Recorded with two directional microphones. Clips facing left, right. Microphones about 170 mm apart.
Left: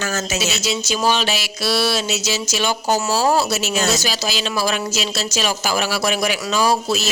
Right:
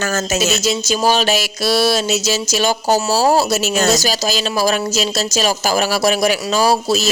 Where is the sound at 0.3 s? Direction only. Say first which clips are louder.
Right 5 dB; 45° right (ahead or behind).